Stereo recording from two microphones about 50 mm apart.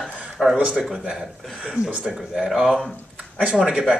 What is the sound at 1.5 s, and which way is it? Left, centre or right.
Speech, centre.